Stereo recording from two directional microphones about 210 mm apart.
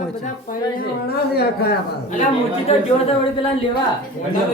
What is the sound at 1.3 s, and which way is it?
Speech, 50° left (ahead or behind).